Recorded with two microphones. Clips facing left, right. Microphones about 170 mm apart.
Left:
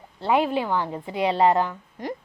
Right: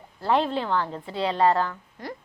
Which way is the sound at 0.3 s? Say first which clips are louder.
Left 2 dB; 10° left (ahead or behind).